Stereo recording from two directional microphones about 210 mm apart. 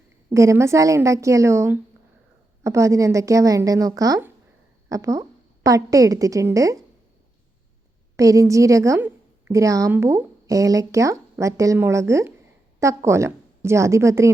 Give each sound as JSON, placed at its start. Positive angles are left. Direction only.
{"t": 0.3, "sound": "a woman's voice", "side_deg": -15}
{"t": 8.1, "sound": "a woman's voice", "side_deg": -15}